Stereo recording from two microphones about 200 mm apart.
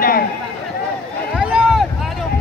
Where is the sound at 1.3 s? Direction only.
5° right (ahead or behind).